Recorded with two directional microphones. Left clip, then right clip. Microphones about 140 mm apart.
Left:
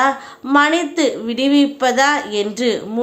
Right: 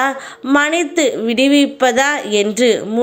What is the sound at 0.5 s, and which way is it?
A woman's voice, 25° right (ahead or behind).